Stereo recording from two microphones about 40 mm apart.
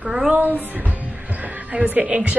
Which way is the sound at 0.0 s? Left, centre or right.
Right.